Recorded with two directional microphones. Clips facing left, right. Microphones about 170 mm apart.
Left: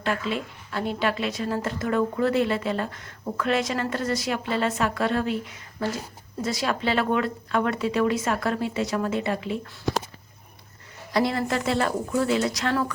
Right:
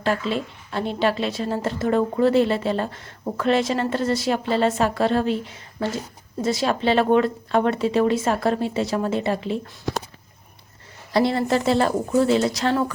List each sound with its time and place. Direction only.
0.0 s a woman's voice: 35° right (ahead or behind)
11.1 s a woman's voice: 30° right (ahead or behind)